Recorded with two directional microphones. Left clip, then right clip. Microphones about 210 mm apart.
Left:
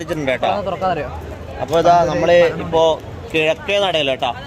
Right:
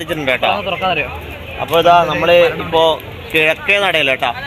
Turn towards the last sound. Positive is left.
turn(degrees=-5)  # may be behind; listen again after turning